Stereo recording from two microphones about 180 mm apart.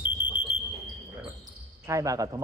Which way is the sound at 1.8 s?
15° right (ahead or behind).